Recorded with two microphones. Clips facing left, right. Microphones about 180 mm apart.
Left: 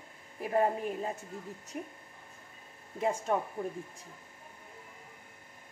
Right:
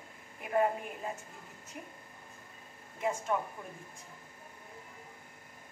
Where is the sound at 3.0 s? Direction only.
35° left (ahead or behind).